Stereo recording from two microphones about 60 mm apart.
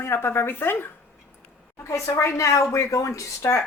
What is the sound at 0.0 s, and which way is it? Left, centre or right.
Speech, left.